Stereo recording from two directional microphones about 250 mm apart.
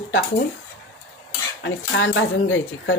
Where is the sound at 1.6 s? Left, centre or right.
Left.